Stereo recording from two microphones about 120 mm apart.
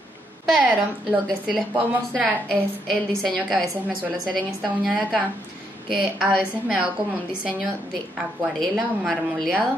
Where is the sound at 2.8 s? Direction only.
5° left (ahead or behind).